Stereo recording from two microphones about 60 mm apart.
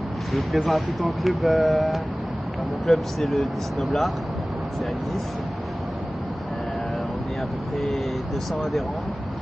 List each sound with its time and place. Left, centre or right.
0.3 s speech: centre